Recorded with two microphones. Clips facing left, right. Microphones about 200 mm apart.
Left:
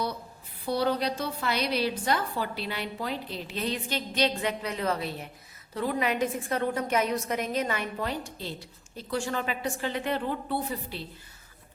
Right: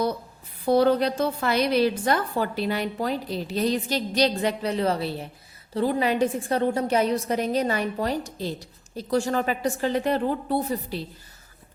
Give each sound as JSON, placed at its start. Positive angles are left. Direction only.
{"t": 0.6, "sound": "a woman's voice", "side_deg": -50}